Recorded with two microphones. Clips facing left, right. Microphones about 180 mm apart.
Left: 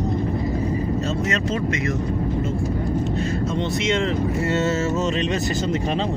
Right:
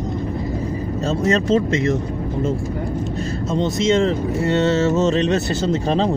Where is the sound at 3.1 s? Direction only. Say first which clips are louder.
Right 1 dB; 40° right (ahead or behind).